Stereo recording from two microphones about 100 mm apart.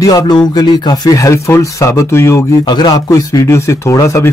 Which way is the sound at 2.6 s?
45° left (ahead or behind).